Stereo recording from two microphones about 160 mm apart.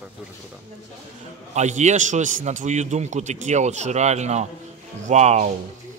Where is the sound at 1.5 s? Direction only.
45° right (ahead or behind).